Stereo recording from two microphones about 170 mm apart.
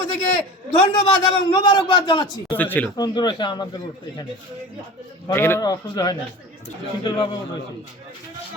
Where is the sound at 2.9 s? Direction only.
25° left (ahead or behind).